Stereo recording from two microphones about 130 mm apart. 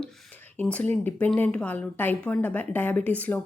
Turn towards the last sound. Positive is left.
turn(degrees=10)  # may be behind; listen again after turning